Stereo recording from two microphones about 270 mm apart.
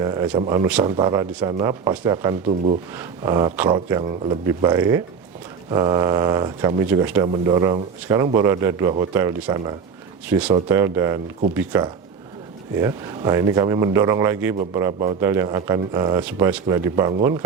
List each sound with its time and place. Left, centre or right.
0.0 s speech: centre